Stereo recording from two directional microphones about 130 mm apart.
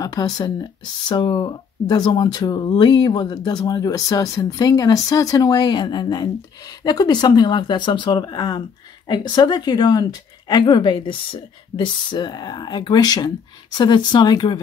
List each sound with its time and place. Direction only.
0.0 s speech: 30° left (ahead or behind)